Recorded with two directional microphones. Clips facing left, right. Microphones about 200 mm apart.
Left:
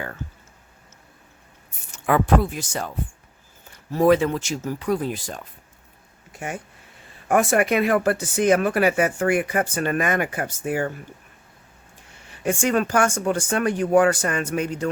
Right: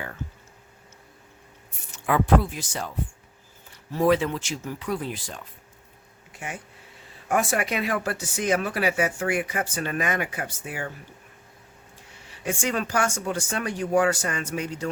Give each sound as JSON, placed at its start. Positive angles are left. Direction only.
{"t": 1.9, "sound": "speech", "side_deg": 50}
{"t": 3.9, "sound": "speech", "side_deg": 45}
{"t": 7.3, "sound": "speech", "side_deg": 55}
{"t": 12.4, "sound": "speech", "side_deg": 50}